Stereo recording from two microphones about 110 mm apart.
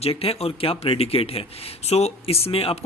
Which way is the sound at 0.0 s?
65° left (ahead or behind).